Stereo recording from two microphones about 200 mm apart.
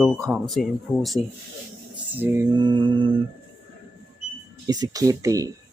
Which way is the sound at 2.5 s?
20° right (ahead or behind).